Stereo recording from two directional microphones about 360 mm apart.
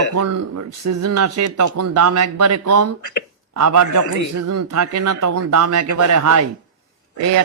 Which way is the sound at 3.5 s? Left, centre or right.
Right.